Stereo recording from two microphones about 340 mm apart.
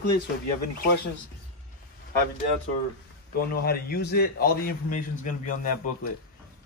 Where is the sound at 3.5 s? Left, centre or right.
Left.